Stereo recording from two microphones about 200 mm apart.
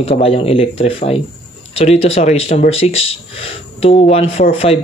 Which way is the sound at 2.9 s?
80° left.